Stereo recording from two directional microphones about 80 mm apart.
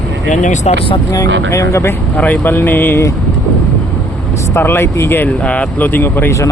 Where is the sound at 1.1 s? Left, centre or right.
Left.